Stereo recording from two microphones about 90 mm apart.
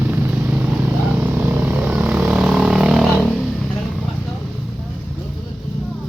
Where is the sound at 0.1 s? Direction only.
20° right (ahead or behind); by 3.3 s centre (ahead or behind).